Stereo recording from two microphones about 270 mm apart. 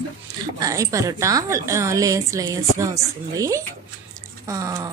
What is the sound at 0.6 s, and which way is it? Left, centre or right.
A woman's voice, centre.